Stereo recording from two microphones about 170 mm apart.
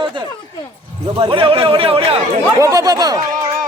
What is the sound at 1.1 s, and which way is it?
A man's voice, 30° right (ahead or behind).